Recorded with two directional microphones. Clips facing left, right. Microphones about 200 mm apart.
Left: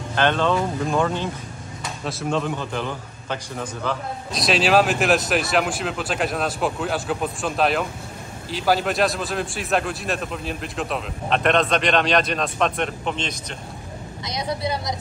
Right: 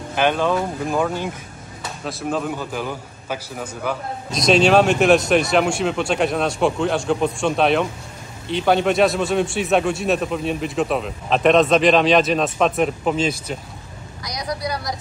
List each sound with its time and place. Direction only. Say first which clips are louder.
0.1 s a man's voice: right 1 dB; 10° right (ahead or behind)
4.3 s a man's voice: right 5 dB; centre (ahead or behind)
14.2 s speech: even; 25° left (ahead or behind)